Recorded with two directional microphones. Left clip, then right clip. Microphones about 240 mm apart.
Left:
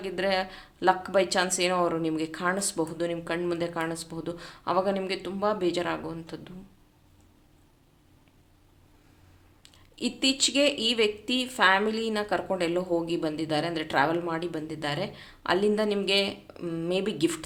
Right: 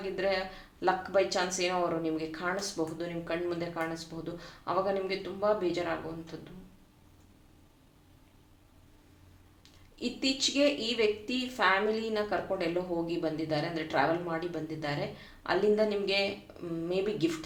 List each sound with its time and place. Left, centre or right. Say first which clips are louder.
0.0 s a woman's voice: left 4 dB; left
9.6 s a woman's voice: left 4 dB; left